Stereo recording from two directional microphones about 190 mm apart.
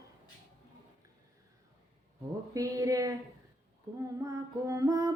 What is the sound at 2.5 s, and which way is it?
Music, 20° right (ahead or behind).